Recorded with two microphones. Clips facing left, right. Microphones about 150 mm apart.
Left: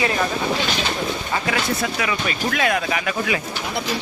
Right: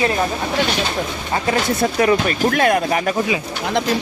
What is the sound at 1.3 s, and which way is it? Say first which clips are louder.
Speech: right 6 dB; 35° right (ahead or behind).